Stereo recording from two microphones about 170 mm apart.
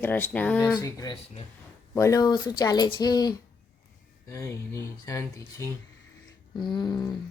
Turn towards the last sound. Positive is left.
turn(degrees=25)  # may be behind; listen again after turning